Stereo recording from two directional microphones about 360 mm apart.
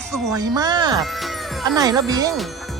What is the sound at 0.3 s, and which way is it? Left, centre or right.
Speech, centre.